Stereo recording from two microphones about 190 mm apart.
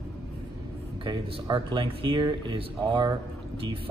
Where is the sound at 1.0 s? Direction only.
25° right (ahead or behind).